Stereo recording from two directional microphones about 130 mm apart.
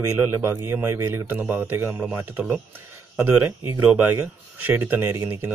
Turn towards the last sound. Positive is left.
turn(degrees=-20)  # may be behind; listen again after turning